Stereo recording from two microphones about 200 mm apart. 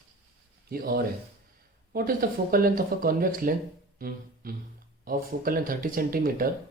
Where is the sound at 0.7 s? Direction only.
50° right (ahead or behind).